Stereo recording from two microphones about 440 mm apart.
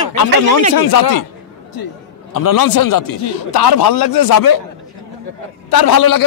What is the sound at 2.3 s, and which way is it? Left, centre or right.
Speech, left.